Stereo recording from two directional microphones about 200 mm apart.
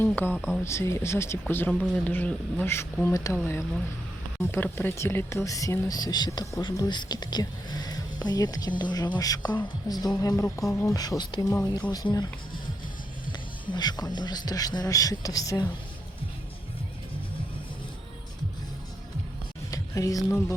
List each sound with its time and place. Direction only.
0.0 s speech: 10° left (ahead or behind)
0.3 s speech: 5° right (ahead or behind)
0.6 s speech: 15° left (ahead or behind)
13.3 s speech: 20° left (ahead or behind)
19.7 s speech: 15° left (ahead or behind)